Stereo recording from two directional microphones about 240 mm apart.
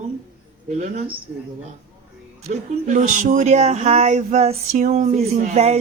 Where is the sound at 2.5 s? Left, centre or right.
Right.